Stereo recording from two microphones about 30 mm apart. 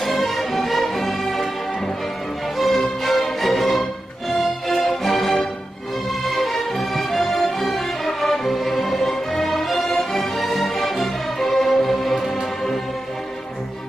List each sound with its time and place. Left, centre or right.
0.0 s music: centre
2.5 s music: centre